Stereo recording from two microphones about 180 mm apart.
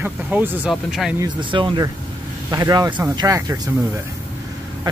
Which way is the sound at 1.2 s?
25° right (ahead or behind).